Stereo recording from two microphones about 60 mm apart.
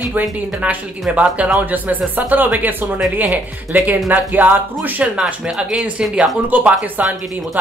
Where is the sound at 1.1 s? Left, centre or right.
Right.